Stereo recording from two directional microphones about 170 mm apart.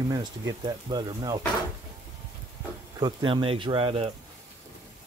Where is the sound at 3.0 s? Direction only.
30° right (ahead or behind).